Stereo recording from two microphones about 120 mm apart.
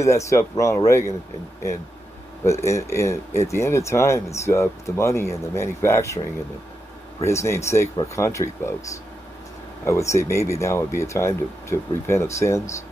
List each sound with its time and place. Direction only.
0.0 s speech: 25° left (ahead or behind)
2.4 s speech: 25° left (ahead or behind)
7.2 s speech: 20° left (ahead or behind)